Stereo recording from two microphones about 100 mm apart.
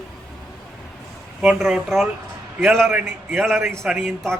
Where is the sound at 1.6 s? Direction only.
5° right (ahead or behind).